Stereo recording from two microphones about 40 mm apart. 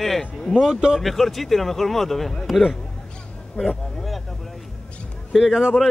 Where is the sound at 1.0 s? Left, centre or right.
Centre.